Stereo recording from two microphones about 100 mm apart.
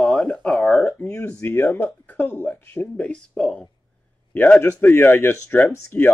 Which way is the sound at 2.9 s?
10° left (ahead or behind).